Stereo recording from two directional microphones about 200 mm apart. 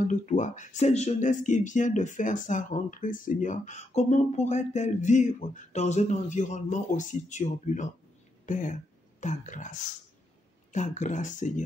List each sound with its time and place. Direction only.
0.1 s speech: 40° left (ahead or behind)